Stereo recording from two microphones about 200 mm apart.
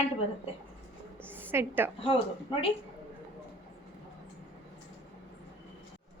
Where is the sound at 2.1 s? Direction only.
25° left (ahead or behind).